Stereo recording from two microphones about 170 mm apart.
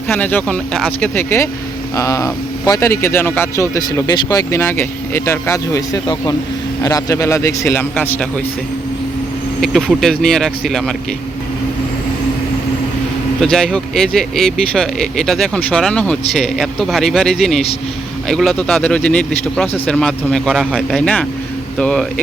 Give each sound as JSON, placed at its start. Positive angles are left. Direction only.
{"t": 0.1, "sound": "speech", "side_deg": 10}
{"t": 9.6, "sound": "speech", "side_deg": 0}
{"t": 13.4, "sound": "speech", "side_deg": 0}